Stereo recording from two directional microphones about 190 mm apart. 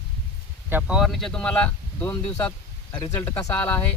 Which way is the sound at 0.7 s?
5° right (ahead or behind).